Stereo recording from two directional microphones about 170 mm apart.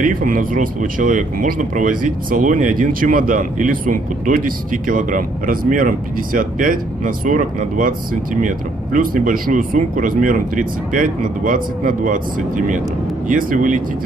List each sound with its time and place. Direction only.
0.0 s speech: 55° right (ahead or behind)